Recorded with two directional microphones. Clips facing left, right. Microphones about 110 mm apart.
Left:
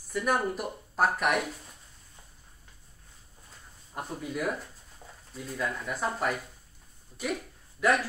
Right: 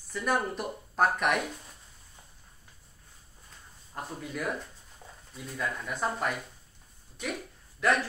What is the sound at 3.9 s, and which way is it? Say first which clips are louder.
Speech: left 1 dB; 10° left (ahead or behind).